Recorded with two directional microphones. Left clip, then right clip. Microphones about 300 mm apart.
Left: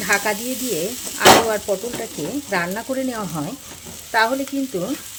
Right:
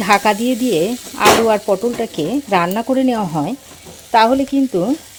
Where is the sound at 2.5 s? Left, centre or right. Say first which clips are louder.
Right 7 dB; right.